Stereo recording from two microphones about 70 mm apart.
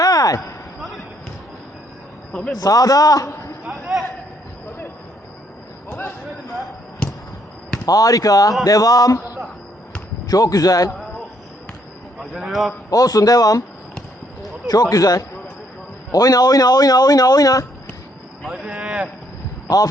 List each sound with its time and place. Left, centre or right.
0.0 s a sound: left
0.8 s basketball bounce: centre
2.3 s a man's voice: centre
2.6 s speech: left
3.7 s a sound: centre
5.9 s a sound: left
7.9 s speech: left
12.2 s a man's voice: centre
12.9 s speech: left
14.7 s speech: left
18.4 s a sound: centre
19.6 s speech: left